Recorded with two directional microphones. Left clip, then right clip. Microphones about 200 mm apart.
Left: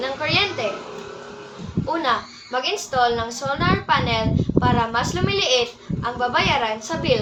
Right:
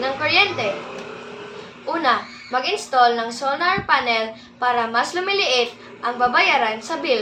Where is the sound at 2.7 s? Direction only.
5° left (ahead or behind).